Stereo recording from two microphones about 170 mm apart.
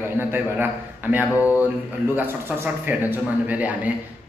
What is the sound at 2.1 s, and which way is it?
A man's voice, 10° right (ahead or behind).